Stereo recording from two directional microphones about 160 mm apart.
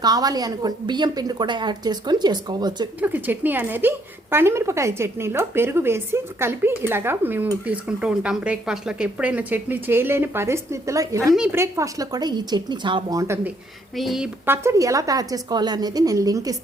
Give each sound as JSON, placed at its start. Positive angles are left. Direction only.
{"t": 0.0, "sound": "a woman's voice", "side_deg": -25}
{"t": 3.0, "sound": "a woman's voice", "side_deg": -10}
{"t": 13.9, "sound": "speech", "side_deg": 0}
{"t": 14.4, "sound": "a woman's voice", "side_deg": -15}